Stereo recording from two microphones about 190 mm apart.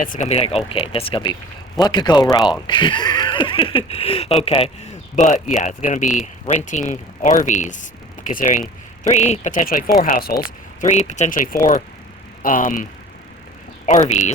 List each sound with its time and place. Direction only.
0.0 s speech: 40° left (ahead or behind)
10.8 s speech: 35° left (ahead or behind)
14.1 s speech: 35° left (ahead or behind)